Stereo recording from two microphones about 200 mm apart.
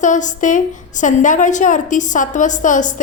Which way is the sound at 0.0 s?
40° left (ahead or behind).